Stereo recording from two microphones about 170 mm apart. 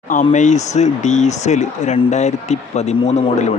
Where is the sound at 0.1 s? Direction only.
50° left (ahead or behind).